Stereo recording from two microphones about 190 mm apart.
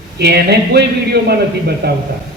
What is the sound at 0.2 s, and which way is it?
Speech, 55° right (ahead or behind).